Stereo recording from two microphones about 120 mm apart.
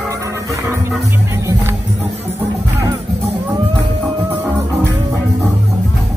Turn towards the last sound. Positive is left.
turn(degrees=-20)  # may be behind; listen again after turning